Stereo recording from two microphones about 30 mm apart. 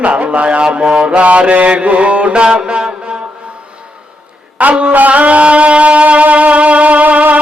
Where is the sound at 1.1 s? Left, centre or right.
Right.